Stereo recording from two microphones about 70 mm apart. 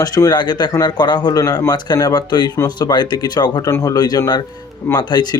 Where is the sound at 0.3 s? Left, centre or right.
Left.